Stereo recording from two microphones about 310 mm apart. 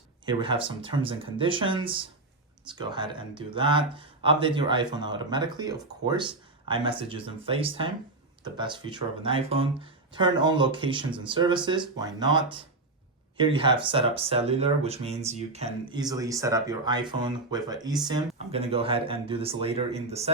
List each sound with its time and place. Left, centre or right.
0.3 s speech: centre